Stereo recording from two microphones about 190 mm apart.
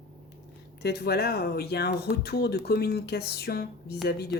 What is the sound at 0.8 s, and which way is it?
A woman's voice, 60° left (ahead or behind).